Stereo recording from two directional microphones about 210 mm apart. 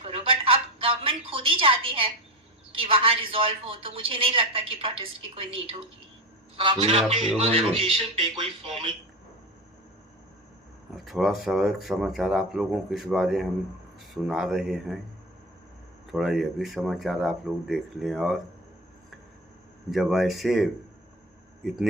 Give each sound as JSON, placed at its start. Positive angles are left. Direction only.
{"t": 0.0, "sound": "a sound", "side_deg": -25}
{"t": 2.7, "sound": "a woman's voice", "side_deg": -25}
{"t": 10.9, "sound": "speech", "side_deg": 0}
{"t": 16.1, "sound": "speech", "side_deg": 0}
{"t": 19.9, "sound": "speech", "side_deg": 0}